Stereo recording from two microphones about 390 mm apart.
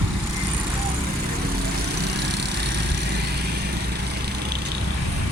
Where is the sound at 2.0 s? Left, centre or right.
Right.